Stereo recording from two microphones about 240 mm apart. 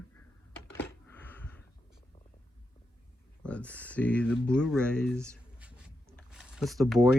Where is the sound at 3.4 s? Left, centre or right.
Centre.